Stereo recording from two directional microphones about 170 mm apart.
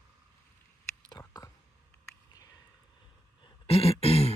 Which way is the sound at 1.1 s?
20° left (ahead or behind).